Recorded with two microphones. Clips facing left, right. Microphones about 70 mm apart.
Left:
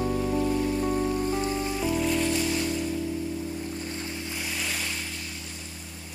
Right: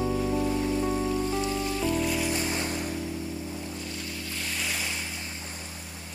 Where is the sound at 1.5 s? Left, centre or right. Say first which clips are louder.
Left 1 dB; left.